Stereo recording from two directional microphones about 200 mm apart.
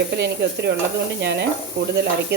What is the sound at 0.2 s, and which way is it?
Speech, 55° right (ahead or behind).